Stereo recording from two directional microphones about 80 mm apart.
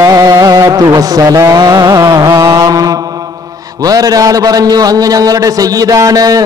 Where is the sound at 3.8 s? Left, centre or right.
Right.